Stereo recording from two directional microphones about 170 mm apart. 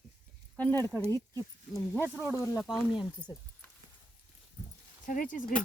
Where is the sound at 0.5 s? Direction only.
10° left (ahead or behind).